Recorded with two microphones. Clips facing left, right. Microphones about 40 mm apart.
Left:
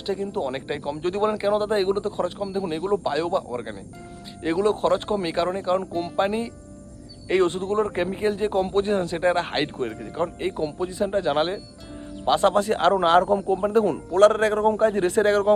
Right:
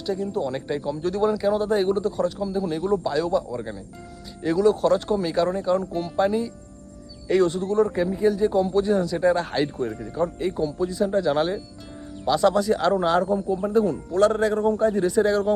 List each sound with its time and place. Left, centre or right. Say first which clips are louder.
0.0 s speech: even; left
9.9 s a man's voice: right 1 dB; left